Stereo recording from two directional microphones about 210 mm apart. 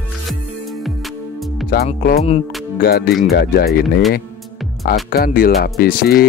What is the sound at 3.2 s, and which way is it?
Speech, 50° left (ahead or behind).